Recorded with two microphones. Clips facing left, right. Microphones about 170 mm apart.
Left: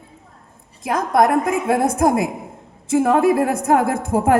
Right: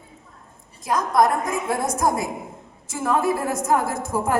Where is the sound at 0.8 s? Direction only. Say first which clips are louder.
Left 3 dB; 60° left (ahead or behind).